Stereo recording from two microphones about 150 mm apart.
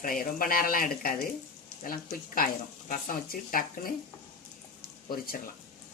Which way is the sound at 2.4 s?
75° left (ahead or behind).